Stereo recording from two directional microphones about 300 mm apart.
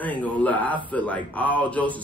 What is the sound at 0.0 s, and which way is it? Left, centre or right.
A man's voice, centre.